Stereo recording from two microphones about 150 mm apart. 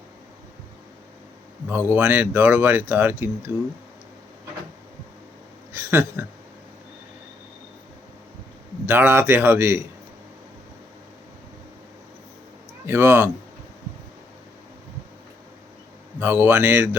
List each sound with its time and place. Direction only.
1.9 s speech: 15° right (ahead or behind)
5.7 s speech: 15° right (ahead or behind)
8.9 s speech: 15° right (ahead or behind)
12.8 s speech: 15° right (ahead or behind)
16.2 s speech: 15° right (ahead or behind)